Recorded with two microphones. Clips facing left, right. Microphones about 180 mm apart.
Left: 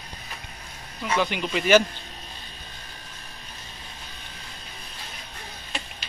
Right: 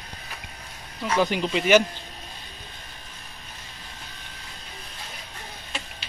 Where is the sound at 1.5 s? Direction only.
15° right (ahead or behind).